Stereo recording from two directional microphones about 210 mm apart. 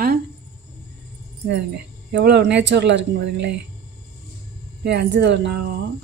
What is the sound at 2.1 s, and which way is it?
Speech, 55° right (ahead or behind).